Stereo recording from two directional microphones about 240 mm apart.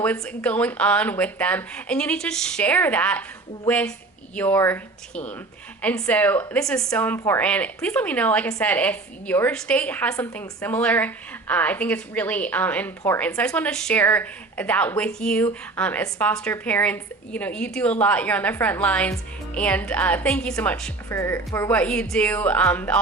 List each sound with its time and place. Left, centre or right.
0.0 s a woman's voice: centre